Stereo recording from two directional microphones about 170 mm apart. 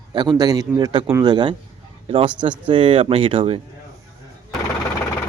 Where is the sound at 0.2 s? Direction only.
25° right (ahead or behind).